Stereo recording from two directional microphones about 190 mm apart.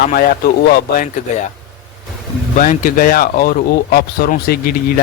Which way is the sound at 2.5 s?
45° left (ahead or behind).